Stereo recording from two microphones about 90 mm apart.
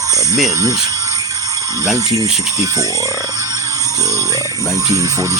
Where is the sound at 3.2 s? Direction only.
40° right (ahead or behind).